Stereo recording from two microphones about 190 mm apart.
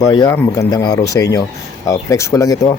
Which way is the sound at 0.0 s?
20° left (ahead or behind).